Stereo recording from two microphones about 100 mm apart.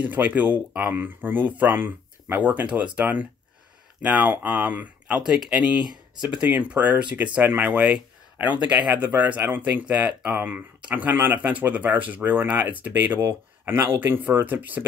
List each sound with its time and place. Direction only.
0.0 s speech: 15° right (ahead or behind)